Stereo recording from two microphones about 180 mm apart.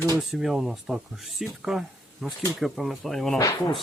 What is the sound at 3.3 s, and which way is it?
Speech, 20° left (ahead or behind).